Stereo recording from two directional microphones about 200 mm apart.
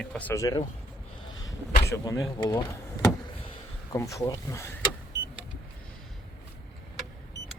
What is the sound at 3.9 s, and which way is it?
Speech, 15° left (ahead or behind).